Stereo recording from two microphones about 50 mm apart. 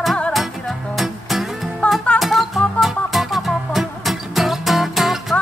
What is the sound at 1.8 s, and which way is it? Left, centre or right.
Music, left.